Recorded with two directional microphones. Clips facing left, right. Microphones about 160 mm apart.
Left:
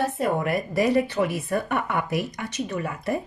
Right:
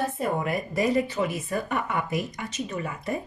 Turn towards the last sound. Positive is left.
turn(degrees=65)  # may be behind; listen again after turning